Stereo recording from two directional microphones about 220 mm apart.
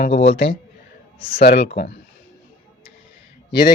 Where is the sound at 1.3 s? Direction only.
45° left (ahead or behind).